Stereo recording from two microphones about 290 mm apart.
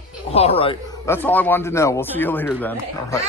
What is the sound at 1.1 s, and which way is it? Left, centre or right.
Speech, centre.